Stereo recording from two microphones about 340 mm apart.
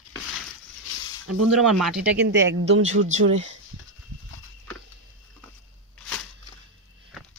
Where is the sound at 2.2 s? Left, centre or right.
Right.